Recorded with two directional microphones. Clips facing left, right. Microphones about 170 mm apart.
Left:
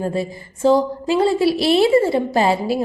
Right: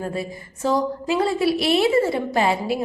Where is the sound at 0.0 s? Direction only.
30° left (ahead or behind).